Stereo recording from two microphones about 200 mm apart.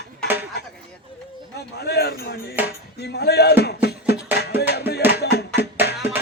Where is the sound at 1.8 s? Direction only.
55° left (ahead or behind).